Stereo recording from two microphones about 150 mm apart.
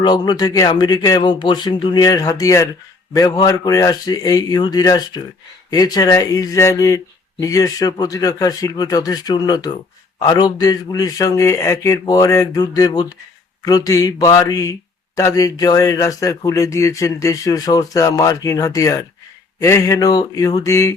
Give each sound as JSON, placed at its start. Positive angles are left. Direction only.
{"t": 0.0, "sound": "speech", "side_deg": 25}